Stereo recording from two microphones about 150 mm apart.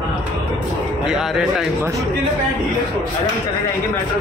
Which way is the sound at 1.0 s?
Centre (ahead or behind).